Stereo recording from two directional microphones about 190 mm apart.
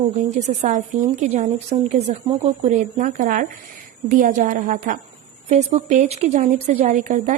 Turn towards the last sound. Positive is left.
turn(degrees=-40)  # may be behind; listen again after turning